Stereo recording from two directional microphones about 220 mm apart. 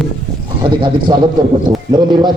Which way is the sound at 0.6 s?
20° right (ahead or behind).